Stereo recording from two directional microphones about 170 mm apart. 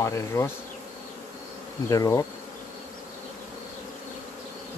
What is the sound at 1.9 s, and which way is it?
Speech, 20° left (ahead or behind).